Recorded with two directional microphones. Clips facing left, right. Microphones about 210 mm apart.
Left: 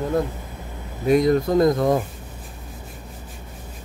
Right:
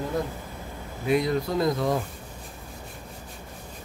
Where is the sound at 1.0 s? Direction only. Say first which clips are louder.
Left 7 dB; 45° left (ahead or behind).